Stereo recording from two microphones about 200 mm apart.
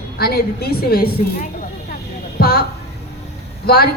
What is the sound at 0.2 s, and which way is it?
A woman's voice, 50° left (ahead or behind).